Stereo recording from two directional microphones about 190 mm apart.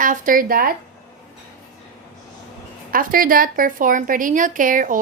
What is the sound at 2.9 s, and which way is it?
A woman's voice, 50° right (ahead or behind).